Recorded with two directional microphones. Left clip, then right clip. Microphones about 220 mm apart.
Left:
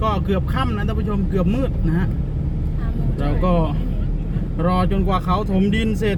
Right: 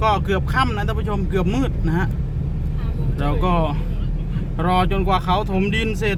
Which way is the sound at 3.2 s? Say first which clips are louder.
Right 1 dB; 25° right (ahead or behind).